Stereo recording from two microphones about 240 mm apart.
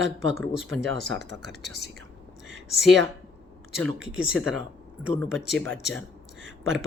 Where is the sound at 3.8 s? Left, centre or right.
Right.